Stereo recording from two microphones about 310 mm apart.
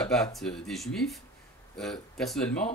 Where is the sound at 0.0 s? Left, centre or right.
Centre.